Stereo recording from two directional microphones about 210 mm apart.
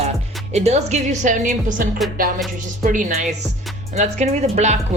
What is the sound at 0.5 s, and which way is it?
A woman's voice, 30° right (ahead or behind).